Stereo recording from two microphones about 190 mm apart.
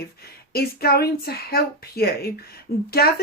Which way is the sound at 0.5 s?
55° left (ahead or behind).